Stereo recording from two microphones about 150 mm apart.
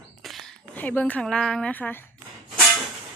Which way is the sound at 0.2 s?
Centre (ahead or behind).